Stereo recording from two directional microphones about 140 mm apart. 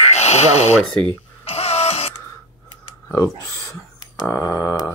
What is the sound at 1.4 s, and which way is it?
Music, 45° left (ahead or behind).